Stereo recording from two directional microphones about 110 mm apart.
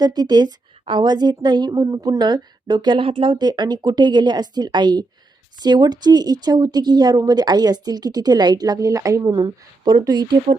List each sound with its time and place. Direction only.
0.0 s a woman's voice: 40° right (ahead or behind)
9.8 s a woman's voice: 40° right (ahead or behind)